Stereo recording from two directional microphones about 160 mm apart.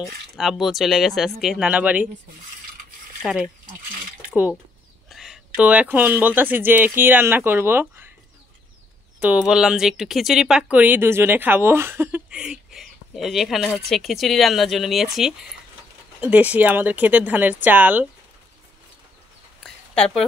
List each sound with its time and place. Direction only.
0.4 s a woman's voice: centre (ahead or behind)
3.2 s speech: 5° right (ahead or behind)
9.2 s a woman's voice: 5° right (ahead or behind)
19.6 s a sound: 5° left (ahead or behind)